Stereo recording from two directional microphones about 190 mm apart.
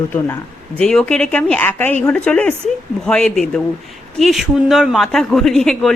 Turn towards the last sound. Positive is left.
turn(degrees=0)  # may be behind; listen again after turning